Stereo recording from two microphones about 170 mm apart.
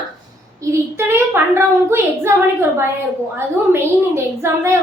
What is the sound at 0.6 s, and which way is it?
A child's voice, 15° right (ahead or behind).